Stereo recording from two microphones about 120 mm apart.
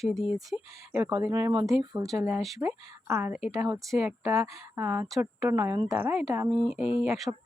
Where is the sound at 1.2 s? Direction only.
30° right (ahead or behind).